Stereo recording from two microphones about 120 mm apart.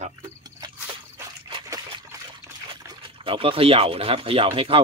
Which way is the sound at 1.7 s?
35° right (ahead or behind).